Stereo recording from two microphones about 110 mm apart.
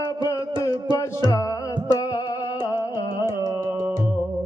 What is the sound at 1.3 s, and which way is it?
Music, 35° left (ahead or behind).